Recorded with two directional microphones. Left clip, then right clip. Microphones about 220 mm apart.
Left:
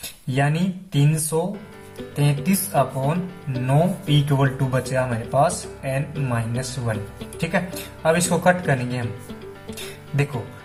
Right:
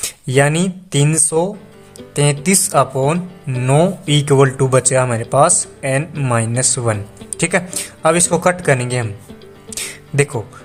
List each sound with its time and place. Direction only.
0.3 s speech: 55° right (ahead or behind)